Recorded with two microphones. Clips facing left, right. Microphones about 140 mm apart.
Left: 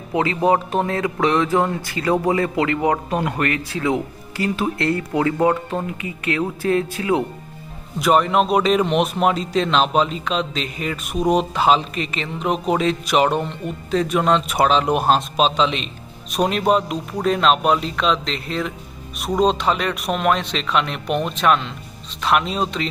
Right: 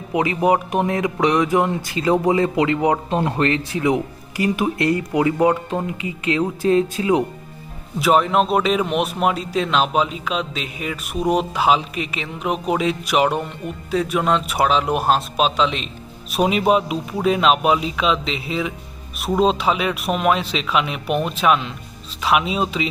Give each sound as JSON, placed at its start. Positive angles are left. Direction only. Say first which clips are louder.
{"t": 0.1, "sound": "speech", "louder": "even", "side_deg": -15}
{"t": 7.9, "sound": "a man's voice", "louder": "even", "side_deg": 0}